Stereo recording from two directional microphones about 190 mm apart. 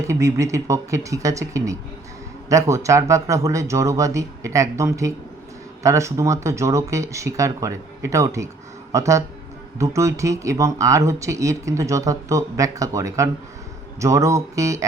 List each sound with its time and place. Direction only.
0.1 s speech: 15° right (ahead or behind)